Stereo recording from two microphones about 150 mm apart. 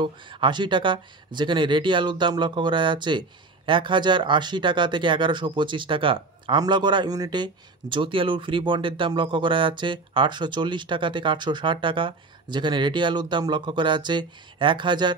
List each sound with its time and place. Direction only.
0.0 s speech: 35° right (ahead or behind)